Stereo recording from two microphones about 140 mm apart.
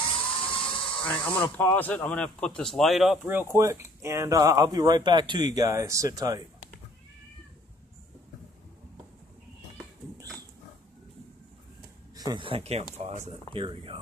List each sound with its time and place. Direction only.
0.0 s dental drill: 40° left (ahead or behind)
1.0 s speech: 10° left (ahead or behind)
3.5 s speech: 20° right (ahead or behind)
12.4 s speech: 40° right (ahead or behind)
13.5 s speech: 40° right (ahead or behind)